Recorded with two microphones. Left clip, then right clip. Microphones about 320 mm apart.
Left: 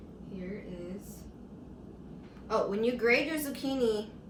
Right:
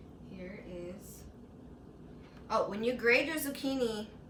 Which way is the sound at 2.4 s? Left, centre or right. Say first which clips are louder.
Left 2 dB; centre.